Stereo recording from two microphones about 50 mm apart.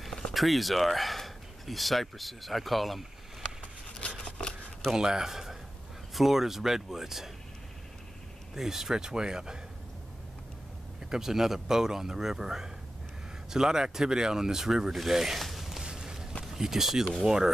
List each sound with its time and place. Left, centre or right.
0.0 s speech: centre
4.2 s a sound: left
4.9 s speech: centre
8.5 s speech: centre
11.1 s speech: centre
15.8 s a sound: centre
16.5 s speech: centre